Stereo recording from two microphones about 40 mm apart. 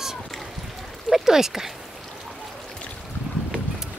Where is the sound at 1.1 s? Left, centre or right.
Centre.